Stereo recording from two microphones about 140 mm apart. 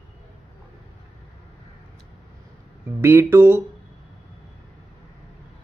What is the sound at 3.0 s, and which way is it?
Speech, 15° right (ahead or behind).